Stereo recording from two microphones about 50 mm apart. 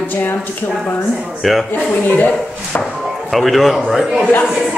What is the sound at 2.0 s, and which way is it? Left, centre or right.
Speech, left.